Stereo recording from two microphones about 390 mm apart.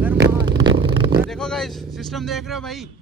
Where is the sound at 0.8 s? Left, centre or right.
Centre.